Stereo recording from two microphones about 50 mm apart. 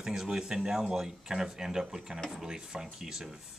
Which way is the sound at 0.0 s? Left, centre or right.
Centre.